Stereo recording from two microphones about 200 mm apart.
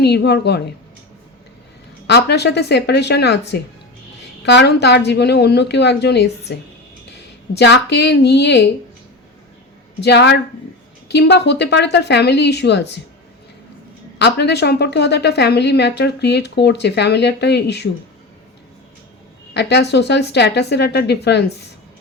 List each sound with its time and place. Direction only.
0.0 s a woman's voice: 55° left (ahead or behind)
2.0 s a woman's voice: 55° left (ahead or behind)
7.5 s a woman's voice: 60° left (ahead or behind)
10.0 s a woman's voice: 60° left (ahead or behind)
14.2 s a woman's voice: 55° left (ahead or behind)
19.5 s a woman's voice: 55° left (ahead or behind)